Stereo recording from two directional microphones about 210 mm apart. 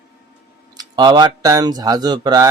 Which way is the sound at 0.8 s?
20° right (ahead or behind).